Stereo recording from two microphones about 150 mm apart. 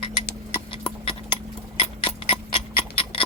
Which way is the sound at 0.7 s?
35° left (ahead or behind).